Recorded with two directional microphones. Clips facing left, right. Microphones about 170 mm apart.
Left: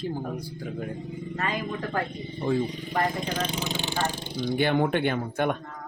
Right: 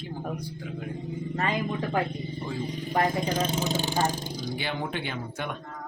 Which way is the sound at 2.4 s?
50° left (ahead or behind).